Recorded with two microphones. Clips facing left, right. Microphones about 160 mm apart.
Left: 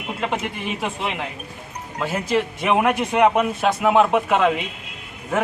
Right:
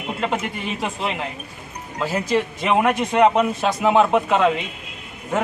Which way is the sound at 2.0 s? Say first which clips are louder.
Right 1 dB; 5° left (ahead or behind).